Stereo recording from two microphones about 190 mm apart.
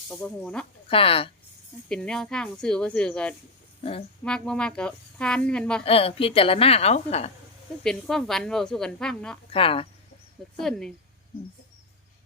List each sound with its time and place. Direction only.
0.1 s speech: centre (ahead or behind)
0.9 s speech: 30° left (ahead or behind)
1.9 s speech: 5° left (ahead or behind)
3.8 s speech: 30° left (ahead or behind)
4.2 s speech: 5° left (ahead or behind)
5.8 s a woman's voice: 30° left (ahead or behind)
7.9 s speech: centre (ahead or behind)
9.5 s speech: 30° left (ahead or behind)
10.6 s speech: 5° left (ahead or behind)